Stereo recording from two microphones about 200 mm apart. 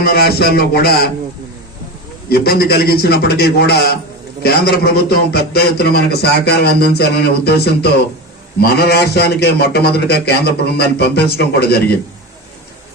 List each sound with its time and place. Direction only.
0.0 s a man's voice: 50° left (ahead or behind)
2.3 s a man's voice: 50° left (ahead or behind)